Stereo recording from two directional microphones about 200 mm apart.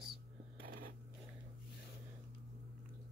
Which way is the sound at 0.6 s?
45° right (ahead or behind).